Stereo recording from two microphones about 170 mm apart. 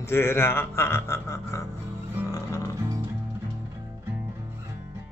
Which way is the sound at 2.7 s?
20° right (ahead or behind).